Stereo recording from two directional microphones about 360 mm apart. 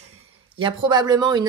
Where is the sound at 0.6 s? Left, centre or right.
Centre.